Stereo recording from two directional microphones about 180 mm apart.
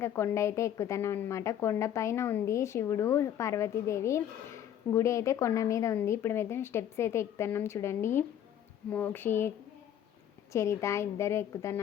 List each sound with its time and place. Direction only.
0.0 s a woman's voice: 15° left (ahead or behind)
10.5 s a woman's voice: 15° left (ahead or behind)